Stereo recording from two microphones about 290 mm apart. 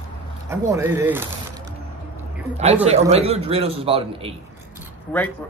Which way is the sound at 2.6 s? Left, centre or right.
Right.